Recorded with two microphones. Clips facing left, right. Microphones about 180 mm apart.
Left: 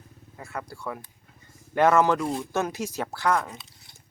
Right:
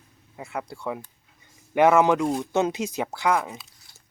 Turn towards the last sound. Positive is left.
turn(degrees=-10)  # may be behind; listen again after turning